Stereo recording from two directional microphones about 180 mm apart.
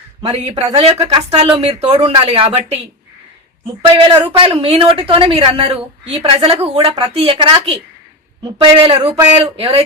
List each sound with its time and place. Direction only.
0.2 s a woman's voice: 35° right (ahead or behind)
4.1 s a woman's voice: 25° right (ahead or behind)